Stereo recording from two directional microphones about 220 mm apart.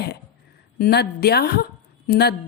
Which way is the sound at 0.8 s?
45° left (ahead or behind).